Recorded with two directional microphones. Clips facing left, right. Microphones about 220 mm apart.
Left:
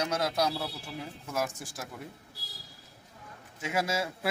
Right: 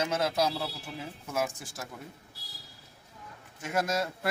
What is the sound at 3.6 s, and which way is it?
Speech, 5° left (ahead or behind).